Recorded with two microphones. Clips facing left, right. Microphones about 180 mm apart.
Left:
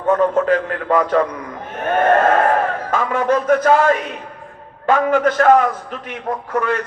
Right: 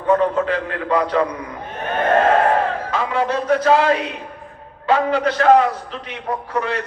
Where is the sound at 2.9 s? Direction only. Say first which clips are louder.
Left 5 dB; 50° left (ahead or behind).